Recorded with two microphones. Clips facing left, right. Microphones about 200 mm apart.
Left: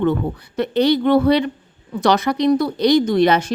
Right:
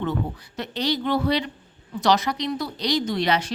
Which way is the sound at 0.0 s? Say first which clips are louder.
Left 8 dB; 55° left (ahead or behind).